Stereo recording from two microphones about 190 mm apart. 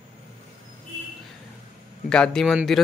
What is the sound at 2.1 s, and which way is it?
Speech, 5° left (ahead or behind).